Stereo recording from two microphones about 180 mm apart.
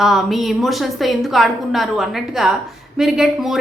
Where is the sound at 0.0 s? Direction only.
Centre (ahead or behind).